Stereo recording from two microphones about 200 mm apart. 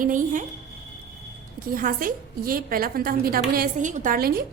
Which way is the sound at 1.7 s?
45° right (ahead or behind).